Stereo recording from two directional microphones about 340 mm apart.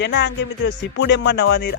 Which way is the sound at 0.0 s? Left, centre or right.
Left.